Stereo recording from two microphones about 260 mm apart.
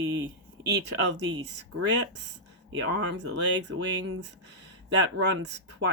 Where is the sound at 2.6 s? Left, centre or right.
Right.